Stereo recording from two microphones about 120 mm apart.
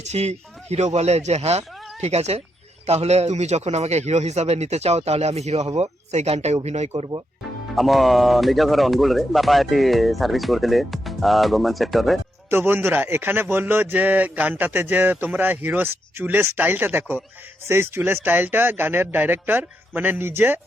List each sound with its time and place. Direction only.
0.0 s a man's voice: 65° right (ahead or behind)
7.8 s speech: centre (ahead or behind)
12.5 s a man's voice: 20° right (ahead or behind)